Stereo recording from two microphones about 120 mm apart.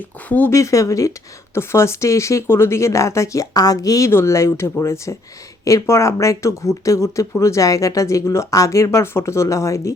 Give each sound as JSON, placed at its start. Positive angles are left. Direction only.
{"t": 0.3, "sound": "speech", "side_deg": 15}
{"t": 0.5, "sound": "speech", "side_deg": 25}